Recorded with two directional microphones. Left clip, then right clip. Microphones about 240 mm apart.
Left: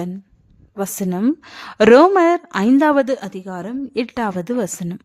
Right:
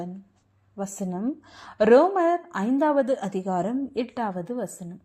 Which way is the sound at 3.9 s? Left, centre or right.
Left.